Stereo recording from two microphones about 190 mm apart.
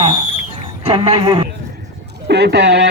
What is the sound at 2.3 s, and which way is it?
Speech, 65° right (ahead or behind).